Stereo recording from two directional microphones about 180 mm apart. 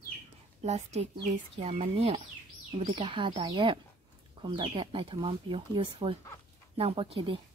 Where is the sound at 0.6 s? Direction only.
40° right (ahead or behind).